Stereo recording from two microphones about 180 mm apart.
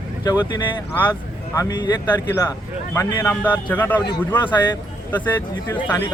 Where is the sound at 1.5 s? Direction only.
20° left (ahead or behind).